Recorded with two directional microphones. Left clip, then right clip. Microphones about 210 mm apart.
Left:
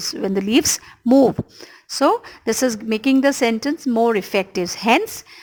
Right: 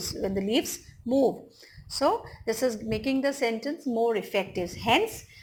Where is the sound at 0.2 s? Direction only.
30° left (ahead or behind).